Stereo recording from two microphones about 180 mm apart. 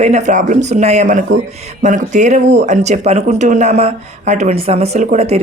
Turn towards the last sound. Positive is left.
turn(degrees=-35)  # may be behind; listen again after turning